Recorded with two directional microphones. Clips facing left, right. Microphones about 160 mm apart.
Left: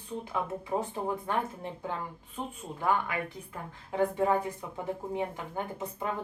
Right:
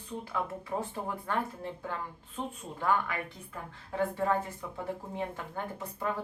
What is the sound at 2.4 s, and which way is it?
Speech, 10° left (ahead or behind).